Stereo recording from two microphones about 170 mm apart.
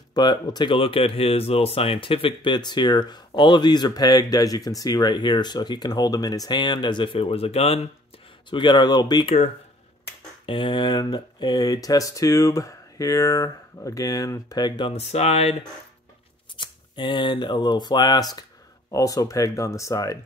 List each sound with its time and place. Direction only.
0.1 s speech: 25° left (ahead or behind)
10.4 s speech: 30° left (ahead or behind)
16.5 s speech: 25° left (ahead or behind)